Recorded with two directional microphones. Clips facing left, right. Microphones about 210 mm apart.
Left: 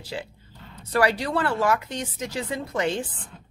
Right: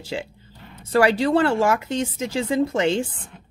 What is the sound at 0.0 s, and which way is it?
Speech, 25° right (ahead or behind).